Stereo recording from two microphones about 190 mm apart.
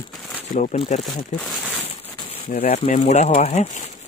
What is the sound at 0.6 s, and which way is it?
Speech, 35° left (ahead or behind).